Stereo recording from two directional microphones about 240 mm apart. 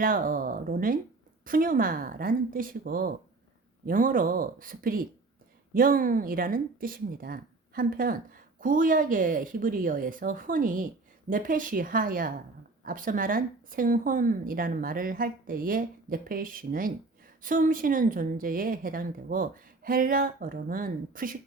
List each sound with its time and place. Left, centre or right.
0.0 s a woman's voice: right